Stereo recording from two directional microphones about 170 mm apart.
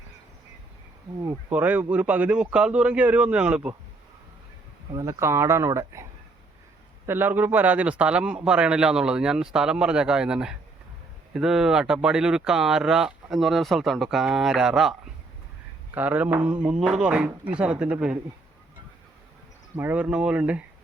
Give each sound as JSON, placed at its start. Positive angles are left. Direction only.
{"t": 1.2, "sound": "speech", "side_deg": -15}
{"t": 4.9, "sound": "speech", "side_deg": -20}
{"t": 16.0, "sound": "speech", "side_deg": -10}
{"t": 19.7, "sound": "speech", "side_deg": -10}